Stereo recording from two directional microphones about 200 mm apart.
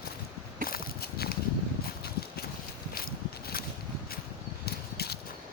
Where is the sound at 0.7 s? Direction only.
50° left (ahead or behind).